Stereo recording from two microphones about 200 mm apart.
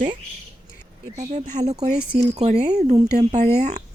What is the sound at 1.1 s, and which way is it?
Speech, 35° right (ahead or behind).